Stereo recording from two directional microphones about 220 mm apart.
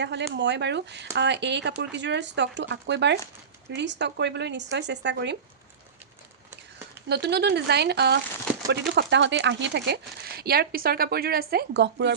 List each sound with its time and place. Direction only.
0.0 s speech: 50° right (ahead or behind)
7.1 s speech: 50° right (ahead or behind)